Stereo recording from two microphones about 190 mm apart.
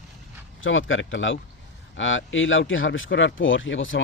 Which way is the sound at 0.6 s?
90° left.